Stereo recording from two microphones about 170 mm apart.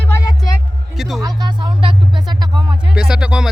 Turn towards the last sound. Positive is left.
turn(degrees=-5)  # may be behind; listen again after turning